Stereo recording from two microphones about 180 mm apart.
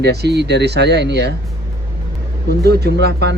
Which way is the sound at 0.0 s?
65° right (ahead or behind).